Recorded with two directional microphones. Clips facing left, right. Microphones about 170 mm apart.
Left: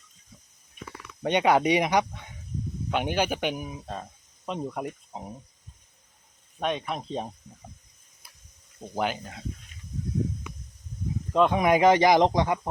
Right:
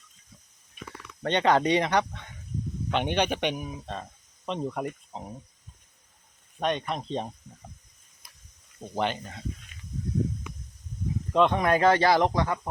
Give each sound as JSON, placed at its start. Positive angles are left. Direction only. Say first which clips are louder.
{"t": 0.8, "sound": "a sound", "louder": "left 1 dB", "side_deg": -75}
{"t": 1.2, "sound": "speech", "louder": "left 1 dB", "side_deg": 10}
{"t": 6.6, "sound": "speech", "louder": "right 1 dB", "side_deg": 0}
{"t": 9.0, "sound": "speech", "louder": "even", "side_deg": 5}
{"t": 11.3, "sound": "speech", "louder": "left 1 dB", "side_deg": 5}